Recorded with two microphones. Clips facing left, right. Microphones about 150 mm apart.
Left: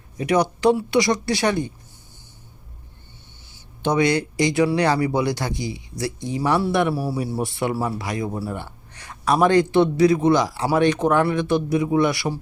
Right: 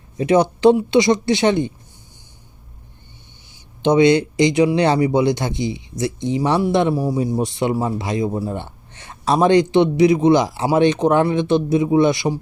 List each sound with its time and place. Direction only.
0.2 s speech: 25° right (ahead or behind)
3.5 s speech: 20° right (ahead or behind)